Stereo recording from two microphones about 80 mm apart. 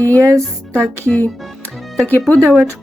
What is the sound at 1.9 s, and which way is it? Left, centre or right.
Speech, centre.